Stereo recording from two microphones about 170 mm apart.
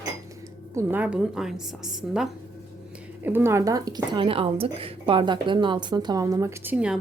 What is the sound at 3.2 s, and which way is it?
Speech, 15° right (ahead or behind).